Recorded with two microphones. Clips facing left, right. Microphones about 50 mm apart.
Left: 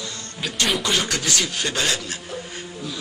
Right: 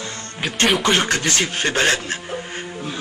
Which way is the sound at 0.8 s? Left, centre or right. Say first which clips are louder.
Right 5 dB; right.